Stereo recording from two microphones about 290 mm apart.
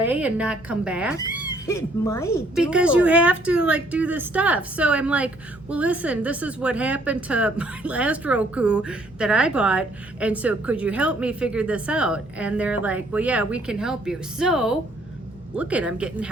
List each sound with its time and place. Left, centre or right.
0.0 s a woman's voice: centre
1.2 s a sound: left
1.6 s speech: centre
2.6 s a woman's voice: centre